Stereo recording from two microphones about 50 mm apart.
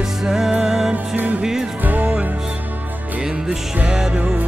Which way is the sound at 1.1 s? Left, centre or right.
Right.